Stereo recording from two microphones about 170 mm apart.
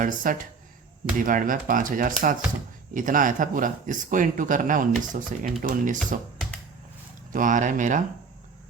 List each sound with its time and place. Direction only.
0.0 s speech: 50° right (ahead or behind)
7.3 s speech: 50° right (ahead or behind)